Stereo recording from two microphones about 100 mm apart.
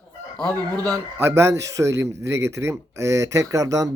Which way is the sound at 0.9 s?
25° right (ahead or behind).